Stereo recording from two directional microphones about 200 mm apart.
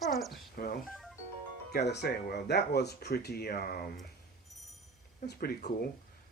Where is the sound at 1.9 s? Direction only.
55° left (ahead or behind).